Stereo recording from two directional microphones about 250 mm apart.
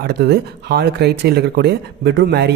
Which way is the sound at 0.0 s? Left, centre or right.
Right.